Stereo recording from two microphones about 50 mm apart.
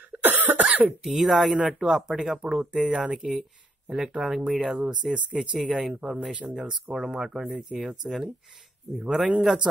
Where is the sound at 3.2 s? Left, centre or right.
Centre; by 6.7 s right.